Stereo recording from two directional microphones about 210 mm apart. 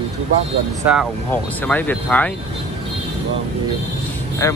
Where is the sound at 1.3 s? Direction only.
10° left (ahead or behind).